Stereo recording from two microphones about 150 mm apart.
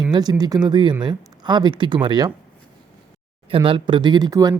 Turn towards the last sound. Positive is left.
turn(degrees=-25)  # may be behind; listen again after turning